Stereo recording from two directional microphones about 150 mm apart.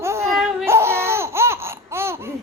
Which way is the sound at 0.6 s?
15° right (ahead or behind).